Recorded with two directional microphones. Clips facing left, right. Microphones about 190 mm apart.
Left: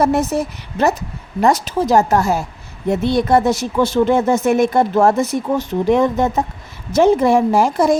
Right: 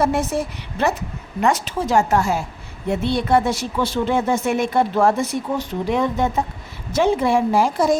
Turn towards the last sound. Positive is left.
turn(degrees=50)  # may be behind; listen again after turning